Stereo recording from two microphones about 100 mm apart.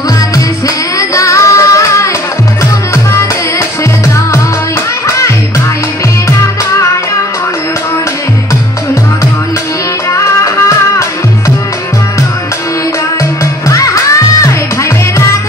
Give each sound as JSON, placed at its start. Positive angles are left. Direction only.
{"t": 0.9, "sound": "music", "side_deg": 30}
{"t": 5.0, "sound": "music", "side_deg": 30}
{"t": 10.1, "sound": "music", "side_deg": 30}
{"t": 13.7, "sound": "music", "side_deg": 35}